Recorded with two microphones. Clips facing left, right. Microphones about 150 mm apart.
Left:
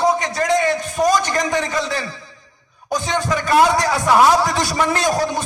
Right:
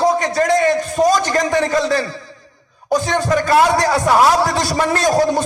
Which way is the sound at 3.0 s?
45° right (ahead or behind).